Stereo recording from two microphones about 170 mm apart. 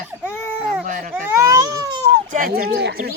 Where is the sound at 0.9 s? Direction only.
55° right (ahead or behind).